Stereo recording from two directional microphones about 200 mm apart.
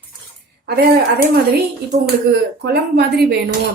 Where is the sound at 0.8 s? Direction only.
50° right (ahead or behind).